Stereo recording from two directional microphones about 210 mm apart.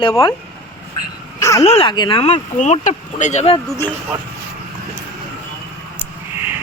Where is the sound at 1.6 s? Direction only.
25° left (ahead or behind).